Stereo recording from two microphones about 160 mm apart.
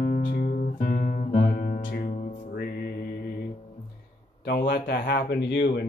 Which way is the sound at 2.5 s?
75° left (ahead or behind).